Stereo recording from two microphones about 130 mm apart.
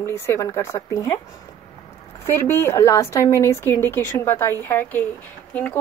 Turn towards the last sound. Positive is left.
turn(degrees=10)  # may be behind; listen again after turning